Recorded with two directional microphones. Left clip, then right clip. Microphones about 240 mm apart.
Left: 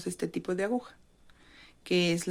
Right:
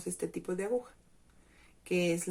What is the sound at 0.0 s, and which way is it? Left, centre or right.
Speech, left.